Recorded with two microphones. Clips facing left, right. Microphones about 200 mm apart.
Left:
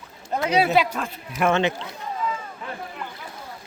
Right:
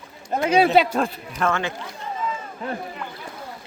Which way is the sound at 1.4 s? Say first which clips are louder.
Left 3 dB; 20° left (ahead or behind).